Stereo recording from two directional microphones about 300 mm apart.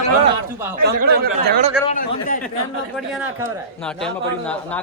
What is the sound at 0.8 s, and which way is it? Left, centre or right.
Speech, right.